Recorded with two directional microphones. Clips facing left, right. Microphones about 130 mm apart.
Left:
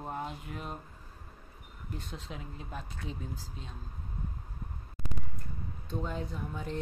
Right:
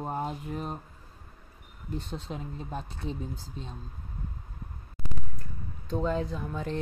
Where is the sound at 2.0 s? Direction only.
30° right (ahead or behind).